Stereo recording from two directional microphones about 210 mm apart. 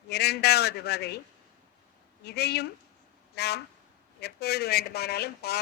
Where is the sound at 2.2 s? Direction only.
50° left (ahead or behind).